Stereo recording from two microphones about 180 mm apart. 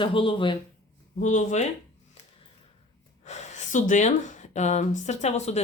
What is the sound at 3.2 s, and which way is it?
Speech, 40° left (ahead or behind).